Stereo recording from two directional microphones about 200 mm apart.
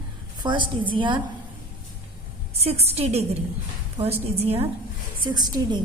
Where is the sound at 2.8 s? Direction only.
30° right (ahead or behind).